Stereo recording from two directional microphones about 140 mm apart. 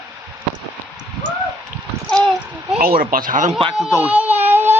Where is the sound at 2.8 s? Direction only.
90° right; by 3.5 s 70° right (ahead or behind).